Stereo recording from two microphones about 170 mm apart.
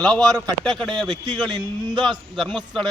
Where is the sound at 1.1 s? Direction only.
25° right (ahead or behind).